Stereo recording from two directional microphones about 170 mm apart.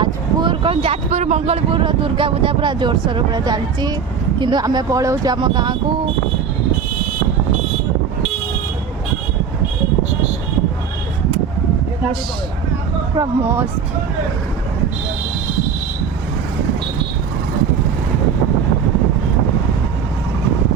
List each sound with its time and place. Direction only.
0.0 s speech: 30° right (ahead or behind)
13.1 s speech: 15° right (ahead or behind)